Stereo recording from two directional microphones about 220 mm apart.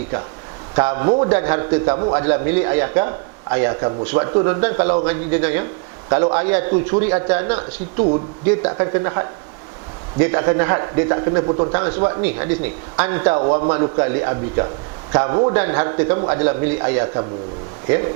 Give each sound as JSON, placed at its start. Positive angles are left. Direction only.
{"t": 0.8, "sound": "a man's voice", "side_deg": -15}
{"t": 6.1, "sound": "a man's voice", "side_deg": -20}
{"t": 6.3, "sound": "a man's voice", "side_deg": -10}
{"t": 11.7, "sound": "a man's voice", "side_deg": -15}
{"t": 13.4, "sound": "a man's voice", "side_deg": -30}
{"t": 14.0, "sound": "a man's voice", "side_deg": -15}
{"t": 15.5, "sound": "a man's voice", "side_deg": -10}